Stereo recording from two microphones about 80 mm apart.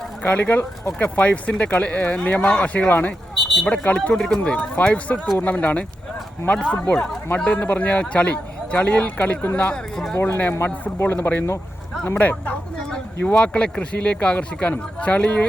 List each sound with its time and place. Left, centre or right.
0.2 s a man's voice: left
3.3 s a sound: centre
3.7 s a man's voice: centre
9.9 s speech: centre
10.2 s a man's voice: left